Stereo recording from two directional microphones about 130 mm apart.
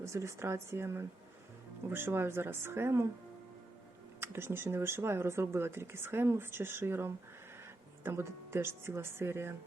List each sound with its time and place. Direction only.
0.0 s speech: 20° right (ahead or behind)
4.2 s speech: 20° right (ahead or behind)